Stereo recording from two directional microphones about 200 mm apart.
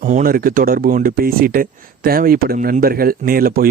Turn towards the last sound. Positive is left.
turn(degrees=-45)  # may be behind; listen again after turning